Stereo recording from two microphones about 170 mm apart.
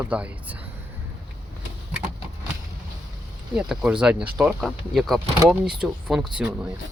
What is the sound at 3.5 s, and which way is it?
Speech, 5° right (ahead or behind).